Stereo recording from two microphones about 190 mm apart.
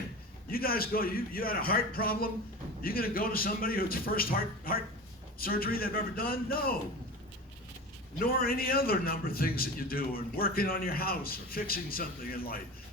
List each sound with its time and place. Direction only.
0.5 s a man's voice: 50° left (ahead or behind)
8.2 s a man's voice: 50° left (ahead or behind)